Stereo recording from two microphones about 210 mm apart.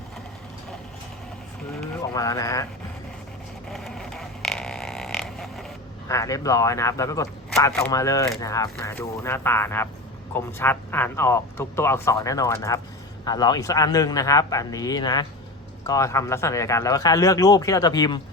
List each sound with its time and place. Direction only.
2.1 s speech: 15° left (ahead or behind)
3.7 s a sound: centre (ahead or behind)
6.1 s speech: 15° left (ahead or behind)